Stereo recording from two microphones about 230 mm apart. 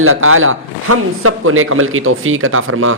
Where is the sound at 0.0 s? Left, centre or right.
Right.